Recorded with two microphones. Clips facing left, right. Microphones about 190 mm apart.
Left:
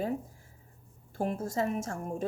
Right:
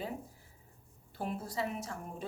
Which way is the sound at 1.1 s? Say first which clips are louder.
Left 6 dB; 45° left (ahead or behind).